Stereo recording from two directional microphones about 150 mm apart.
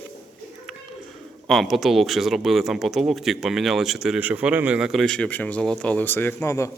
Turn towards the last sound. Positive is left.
turn(degrees=20)  # may be behind; listen again after turning